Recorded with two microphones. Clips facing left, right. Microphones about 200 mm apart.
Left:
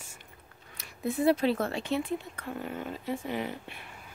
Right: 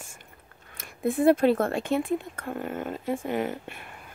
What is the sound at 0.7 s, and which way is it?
Speech, 50° right (ahead or behind).